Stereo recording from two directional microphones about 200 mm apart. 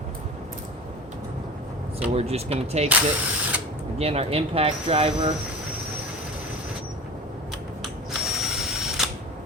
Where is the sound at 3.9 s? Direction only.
30° right (ahead or behind).